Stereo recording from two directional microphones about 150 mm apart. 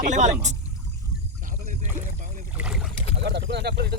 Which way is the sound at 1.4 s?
60° right (ahead or behind).